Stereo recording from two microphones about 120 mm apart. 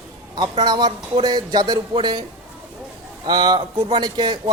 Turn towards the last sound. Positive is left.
turn(degrees=-35)  # may be behind; listen again after turning